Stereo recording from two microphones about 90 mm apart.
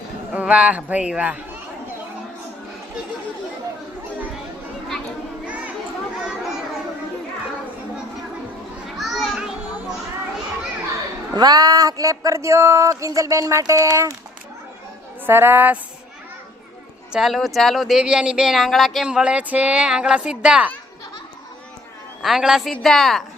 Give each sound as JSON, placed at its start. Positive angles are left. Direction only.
{"t": 0.3, "sound": "speech", "side_deg": -15}
{"t": 5.5, "sound": "children playing", "side_deg": -15}
{"t": 9.0, "sound": "children playing", "side_deg": 0}
{"t": 11.3, "sound": "a sound", "side_deg": -50}
{"t": 15.3, "sound": "a woman's voice", "side_deg": -25}
{"t": 17.1, "sound": "speech", "side_deg": -5}
{"t": 19.0, "sound": "speech", "side_deg": -10}
{"t": 22.2, "sound": "speech", "side_deg": -5}